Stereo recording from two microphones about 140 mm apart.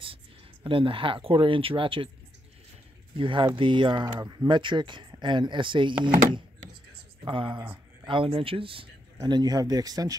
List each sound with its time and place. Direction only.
0.7 s speech: 40° right (ahead or behind)
3.2 s speech: 35° right (ahead or behind)
7.6 s a sound: 15° right (ahead or behind)
8.1 s speech: 40° right (ahead or behind)
9.2 s speech: 30° right (ahead or behind)